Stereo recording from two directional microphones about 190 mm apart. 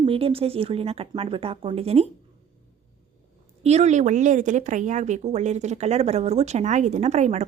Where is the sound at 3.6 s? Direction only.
35° right (ahead or behind).